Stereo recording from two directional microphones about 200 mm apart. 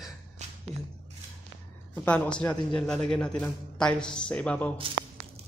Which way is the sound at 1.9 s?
5° left (ahead or behind).